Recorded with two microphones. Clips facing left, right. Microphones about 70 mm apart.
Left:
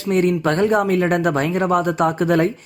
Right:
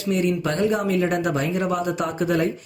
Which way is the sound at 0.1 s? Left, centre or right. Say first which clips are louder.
Left 5 dB; left.